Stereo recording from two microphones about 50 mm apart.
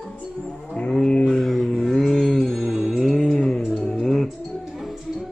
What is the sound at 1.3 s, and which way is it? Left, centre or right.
Mantra, centre.